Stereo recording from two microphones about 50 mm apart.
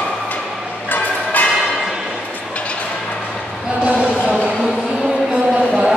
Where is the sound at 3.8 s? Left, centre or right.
Right.